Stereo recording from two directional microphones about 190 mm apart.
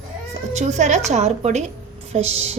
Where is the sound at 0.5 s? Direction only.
40° right (ahead or behind).